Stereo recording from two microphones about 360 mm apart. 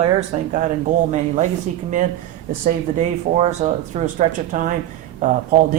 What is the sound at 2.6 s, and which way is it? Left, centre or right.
Speech, centre.